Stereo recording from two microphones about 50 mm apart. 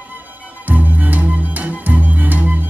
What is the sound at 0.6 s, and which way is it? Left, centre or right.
Music, right.